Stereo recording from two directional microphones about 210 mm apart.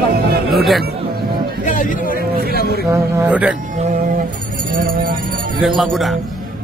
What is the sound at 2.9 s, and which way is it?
Speech, 15° right (ahead or behind).